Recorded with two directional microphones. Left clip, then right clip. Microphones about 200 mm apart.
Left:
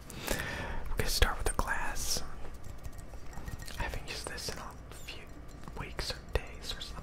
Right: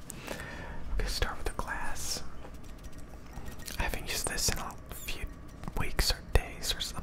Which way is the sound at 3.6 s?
15° right (ahead or behind).